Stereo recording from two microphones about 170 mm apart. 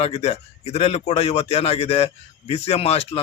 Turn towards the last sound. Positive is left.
turn(degrees=35)  # may be behind; listen again after turning